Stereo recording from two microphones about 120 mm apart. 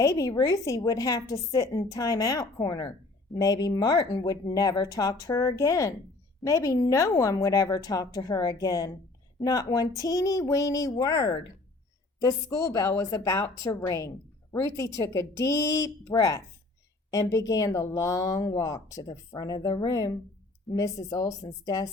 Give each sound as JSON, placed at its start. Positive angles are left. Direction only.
{"t": 0.0, "sound": "a woman's voice", "side_deg": 30}